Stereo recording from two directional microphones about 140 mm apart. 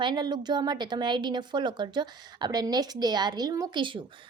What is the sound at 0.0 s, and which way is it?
A woman's voice, 30° right (ahead or behind).